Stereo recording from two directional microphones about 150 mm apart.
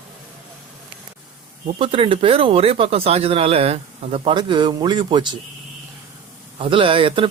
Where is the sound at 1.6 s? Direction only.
40° right (ahead or behind).